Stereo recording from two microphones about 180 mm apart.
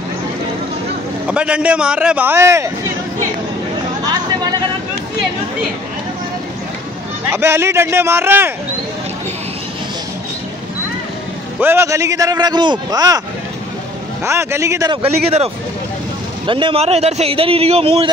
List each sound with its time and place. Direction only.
1.2 s speech: 5° right (ahead or behind)
4.0 s a sound: 20° right (ahead or behind)
7.2 s speech: 15° right (ahead or behind)
11.6 s a man's voice: 15° right (ahead or behind)
14.2 s speech: 15° right (ahead or behind)
15.0 s a man's voice: 35° right (ahead or behind)